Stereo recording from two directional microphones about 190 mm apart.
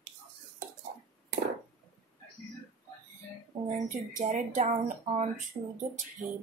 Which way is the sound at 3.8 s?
40° right (ahead or behind).